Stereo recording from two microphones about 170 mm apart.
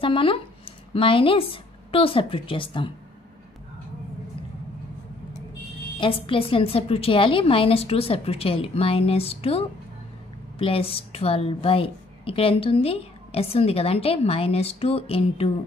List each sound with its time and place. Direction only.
0.0 s speech: 30° left (ahead or behind)
5.9 s a woman's voice: 30° left (ahead or behind)